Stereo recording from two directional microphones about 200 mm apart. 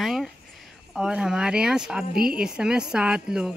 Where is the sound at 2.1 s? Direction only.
50° right (ahead or behind).